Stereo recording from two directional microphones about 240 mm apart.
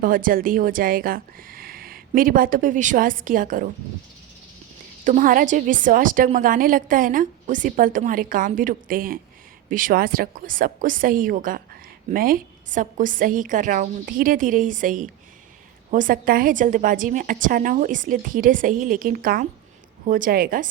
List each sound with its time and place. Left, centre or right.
0.0 s a woman's voice: right
5.0 s a woman's voice: right